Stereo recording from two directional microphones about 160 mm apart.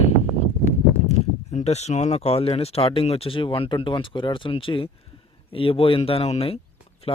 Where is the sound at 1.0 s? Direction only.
45° left (ahead or behind).